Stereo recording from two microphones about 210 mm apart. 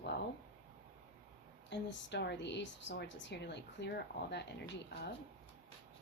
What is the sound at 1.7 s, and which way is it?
Speech, 55° left (ahead or behind).